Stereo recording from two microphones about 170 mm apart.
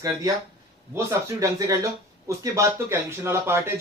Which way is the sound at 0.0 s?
20° right (ahead or behind).